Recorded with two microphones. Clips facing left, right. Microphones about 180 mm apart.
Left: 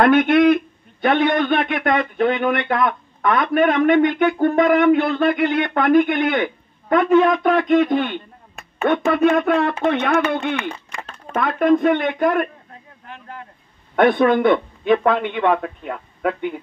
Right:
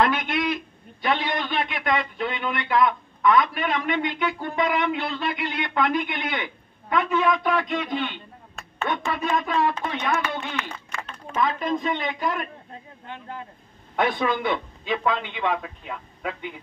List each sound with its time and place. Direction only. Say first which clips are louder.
0.0 s a man's voice: left 10 dB; 55° left (ahead or behind)
13.9 s a man's voice: left 9 dB; 60° left (ahead or behind)